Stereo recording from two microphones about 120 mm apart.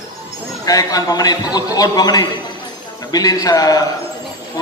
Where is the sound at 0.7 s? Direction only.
30° left (ahead or behind).